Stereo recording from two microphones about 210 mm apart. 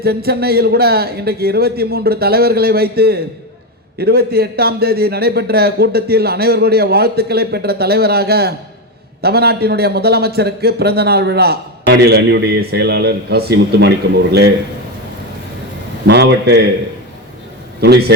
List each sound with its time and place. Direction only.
0.0 s a man's voice: 50° right (ahead or behind)
16.0 s a man's voice: 55° right (ahead or behind)
17.7 s a man's voice: 50° right (ahead or behind)